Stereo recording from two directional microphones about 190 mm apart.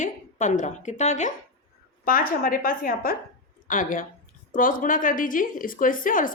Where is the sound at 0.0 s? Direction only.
40° left (ahead or behind).